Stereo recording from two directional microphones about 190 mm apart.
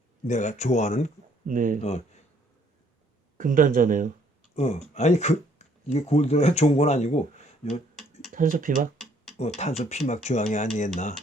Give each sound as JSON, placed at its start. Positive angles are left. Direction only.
{"t": 0.3, "sound": "speech", "side_deg": 40}
{"t": 1.5, "sound": "speech", "side_deg": -45}
{"t": 3.3, "sound": "speech", "side_deg": -45}
{"t": 4.5, "sound": "speech", "side_deg": 35}
{"t": 8.3, "sound": "speech", "side_deg": -45}
{"t": 9.6, "sound": "speech", "side_deg": 35}